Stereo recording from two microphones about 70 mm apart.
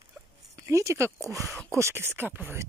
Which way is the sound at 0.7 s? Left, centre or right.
Right.